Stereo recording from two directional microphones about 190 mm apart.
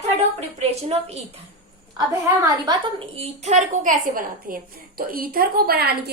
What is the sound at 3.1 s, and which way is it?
Speech, 35° right (ahead or behind).